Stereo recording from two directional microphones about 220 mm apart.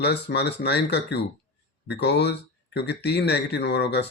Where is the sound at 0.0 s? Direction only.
50° left (ahead or behind).